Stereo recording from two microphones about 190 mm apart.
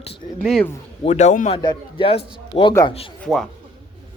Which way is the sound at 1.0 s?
35° left (ahead or behind).